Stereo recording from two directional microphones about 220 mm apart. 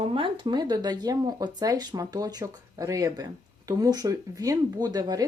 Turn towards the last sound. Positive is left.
turn(degrees=-20)  # may be behind; listen again after turning